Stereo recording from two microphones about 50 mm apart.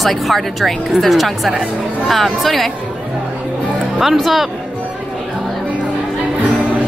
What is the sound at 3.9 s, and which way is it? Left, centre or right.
Speech, centre.